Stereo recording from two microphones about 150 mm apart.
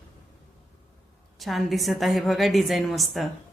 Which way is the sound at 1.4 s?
Centre (ahead or behind).